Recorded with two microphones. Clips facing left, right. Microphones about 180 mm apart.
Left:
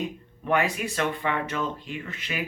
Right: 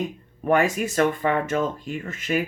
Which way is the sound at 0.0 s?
45° right (ahead or behind).